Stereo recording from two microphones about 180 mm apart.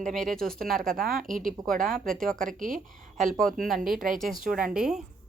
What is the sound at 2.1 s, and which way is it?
Speech, 5° left (ahead or behind).